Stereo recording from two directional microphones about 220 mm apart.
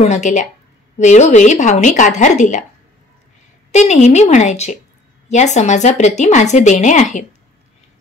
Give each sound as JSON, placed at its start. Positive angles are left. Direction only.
{"t": 0.1, "sound": "speech", "side_deg": 35}
{"t": 3.7, "sound": "speech", "side_deg": 30}